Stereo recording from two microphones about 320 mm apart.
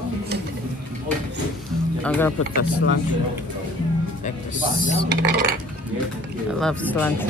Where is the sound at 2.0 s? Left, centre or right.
Centre.